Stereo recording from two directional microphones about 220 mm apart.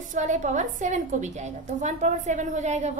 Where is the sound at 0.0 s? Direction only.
35° right (ahead or behind).